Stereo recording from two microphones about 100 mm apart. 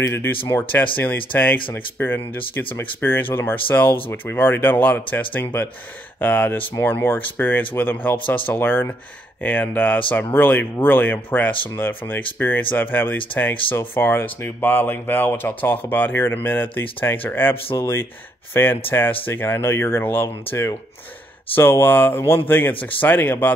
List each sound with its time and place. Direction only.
0.9 s speech: 15° left (ahead or behind)